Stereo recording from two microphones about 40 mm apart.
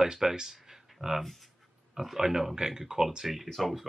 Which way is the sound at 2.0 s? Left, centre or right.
Centre.